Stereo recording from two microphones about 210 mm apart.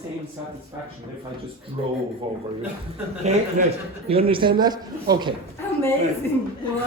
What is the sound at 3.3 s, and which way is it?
Speech, 30° right (ahead or behind).